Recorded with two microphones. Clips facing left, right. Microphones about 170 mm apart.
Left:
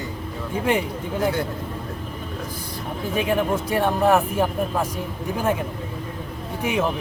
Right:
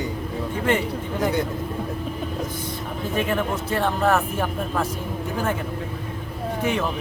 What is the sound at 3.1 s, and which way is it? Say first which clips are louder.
Speech: left 3 dB; 10° left (ahead or behind).